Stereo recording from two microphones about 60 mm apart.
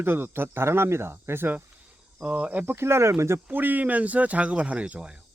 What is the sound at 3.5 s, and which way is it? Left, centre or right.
Speech, right.